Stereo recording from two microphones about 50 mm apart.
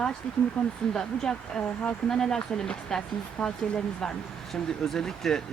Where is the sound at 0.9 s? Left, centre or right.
Centre.